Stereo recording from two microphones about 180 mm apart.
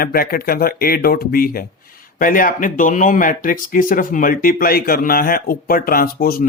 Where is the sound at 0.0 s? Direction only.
55° left (ahead or behind).